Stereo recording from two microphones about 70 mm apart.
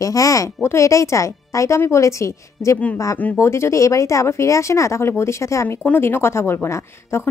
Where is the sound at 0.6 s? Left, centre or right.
Left.